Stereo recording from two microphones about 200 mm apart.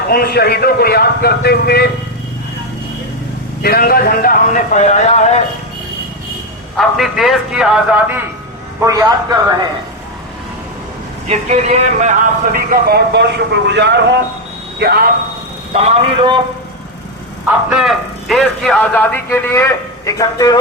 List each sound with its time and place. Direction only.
0.1 s speech: 50° left (ahead or behind)
3.6 s speech: 50° left (ahead or behind)
6.7 s a man's voice: centre (ahead or behind)
11.3 s speech: 35° right (ahead or behind); by 15.1 s 50° right (ahead or behind)
15.7 s speech: 30° right (ahead or behind)
17.4 s a man's voice: 5° right (ahead or behind); by 20.6 s 20° left (ahead or behind)